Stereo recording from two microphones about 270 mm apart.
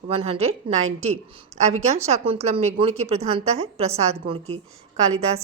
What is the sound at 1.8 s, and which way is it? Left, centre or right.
A woman's voice, right.